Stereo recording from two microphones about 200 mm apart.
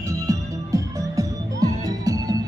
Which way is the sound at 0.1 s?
15° right (ahead or behind).